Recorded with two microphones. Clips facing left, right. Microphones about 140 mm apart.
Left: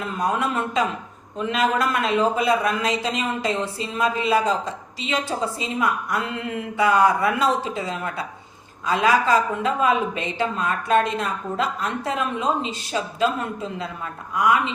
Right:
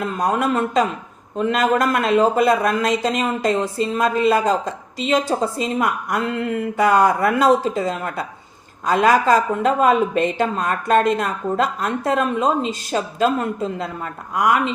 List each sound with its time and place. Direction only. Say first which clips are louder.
0.0 s speech: right 4 dB; 45° right (ahead or behind)